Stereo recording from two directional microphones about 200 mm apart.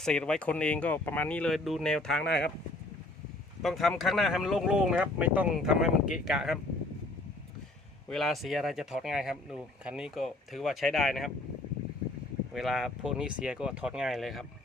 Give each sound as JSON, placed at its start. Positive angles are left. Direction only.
{"t": 0.0, "sound": "speech", "side_deg": 5}
{"t": 2.2, "sound": "speech", "side_deg": 60}
{"t": 3.6, "sound": "speech", "side_deg": 0}
{"t": 8.1, "sound": "speech", "side_deg": 0}
{"t": 12.5, "sound": "speech", "side_deg": 0}